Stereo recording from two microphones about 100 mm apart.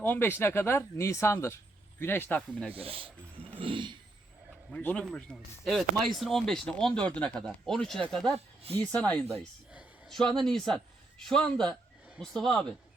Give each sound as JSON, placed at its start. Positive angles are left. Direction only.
{"t": 0.0, "sound": "speech", "side_deg": 20}
{"t": 2.7, "sound": "speech", "side_deg": -70}
{"t": 3.5, "sound": "a sound", "side_deg": -60}
{"t": 4.7, "sound": "a man's voice", "side_deg": 15}